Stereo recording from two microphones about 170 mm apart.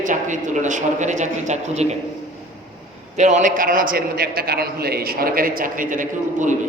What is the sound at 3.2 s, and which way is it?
A man's voice, 45° right (ahead or behind).